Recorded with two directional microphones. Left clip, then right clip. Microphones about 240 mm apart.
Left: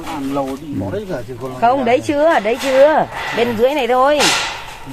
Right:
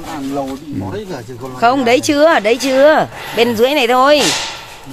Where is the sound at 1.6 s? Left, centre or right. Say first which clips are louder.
Right 2 dB; right.